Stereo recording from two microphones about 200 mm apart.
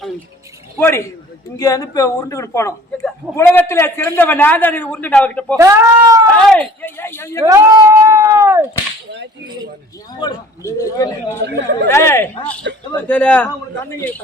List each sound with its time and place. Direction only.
0.8 s a man's voice: 15° left (ahead or behind)
5.5 s speech: 15° right (ahead or behind)
6.3 s a man's voice: 5° left (ahead or behind)
7.4 s speech: 15° right (ahead or behind)
10.2 s a man's voice: 20° left (ahead or behind)
12.7 s speech: 60° right (ahead or behind)
13.0 s a man's voice: 10° left (ahead or behind)